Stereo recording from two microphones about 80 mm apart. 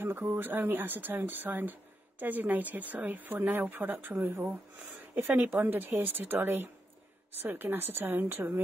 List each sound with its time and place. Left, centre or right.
0.0 s speech: right